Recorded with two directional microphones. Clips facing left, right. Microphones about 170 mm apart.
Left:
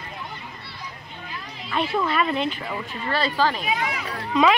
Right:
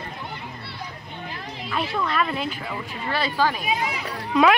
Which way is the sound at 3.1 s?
10° right (ahead or behind).